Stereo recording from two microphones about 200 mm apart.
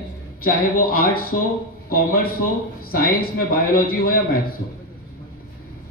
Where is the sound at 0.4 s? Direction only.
45° left (ahead or behind).